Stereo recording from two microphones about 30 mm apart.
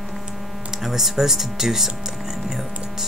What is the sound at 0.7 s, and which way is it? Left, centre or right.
Speech, centre.